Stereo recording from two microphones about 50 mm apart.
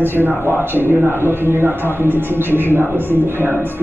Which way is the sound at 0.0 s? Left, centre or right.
Right.